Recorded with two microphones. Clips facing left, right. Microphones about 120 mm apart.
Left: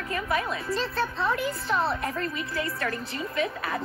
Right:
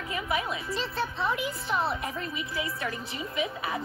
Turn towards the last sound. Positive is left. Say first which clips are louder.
# left 2 dB
turn(degrees=-10)  # may be behind; listen again after turning